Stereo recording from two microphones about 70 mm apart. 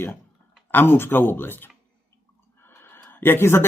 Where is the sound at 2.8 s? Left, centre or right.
Left.